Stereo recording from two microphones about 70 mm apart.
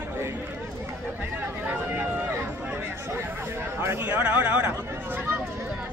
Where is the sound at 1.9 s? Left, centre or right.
Right.